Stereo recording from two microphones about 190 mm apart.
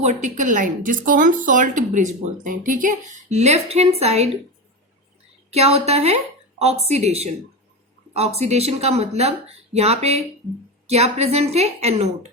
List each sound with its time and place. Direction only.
0.0 s speech: 40° right (ahead or behind)
5.5 s a woman's voice: 35° right (ahead or behind)